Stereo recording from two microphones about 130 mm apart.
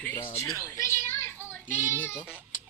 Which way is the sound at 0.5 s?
20° left (ahead or behind).